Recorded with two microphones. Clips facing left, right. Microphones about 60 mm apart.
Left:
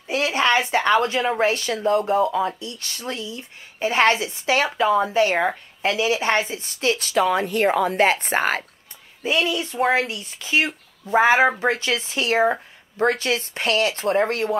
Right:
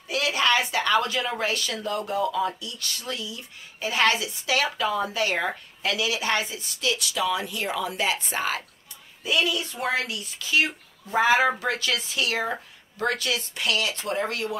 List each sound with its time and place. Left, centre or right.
0.1 s speech: left
9.2 s speech: left